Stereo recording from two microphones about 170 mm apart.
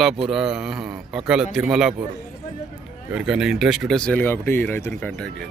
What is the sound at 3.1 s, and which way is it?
Speech, 5° right (ahead or behind).